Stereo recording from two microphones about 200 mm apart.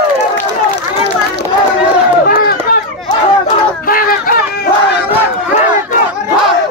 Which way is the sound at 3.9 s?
45° left (ahead or behind).